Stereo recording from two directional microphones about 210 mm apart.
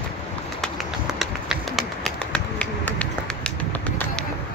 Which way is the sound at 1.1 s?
Centre (ahead or behind).